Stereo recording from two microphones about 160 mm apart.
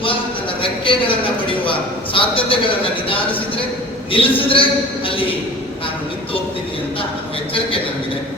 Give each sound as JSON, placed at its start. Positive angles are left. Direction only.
{"t": 0.6, "sound": "a man's voice", "side_deg": 35}
{"t": 4.1, "sound": "a man's voice", "side_deg": 35}